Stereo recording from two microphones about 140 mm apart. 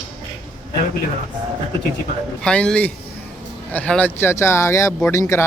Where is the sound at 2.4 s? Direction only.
5° left (ahead or behind).